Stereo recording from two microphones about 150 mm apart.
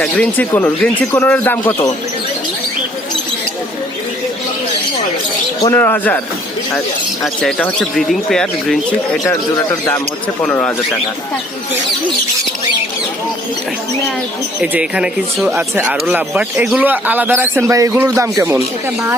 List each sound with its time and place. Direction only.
0.0 s a man's voice: 10° left (ahead or behind)
5.6 s a man's voice: 15° left (ahead or behind)
7.4 s speech: 5° left (ahead or behind)
10.4 s a man's voice: 10° left (ahead or behind)
14.6 s speech: 5° right (ahead or behind)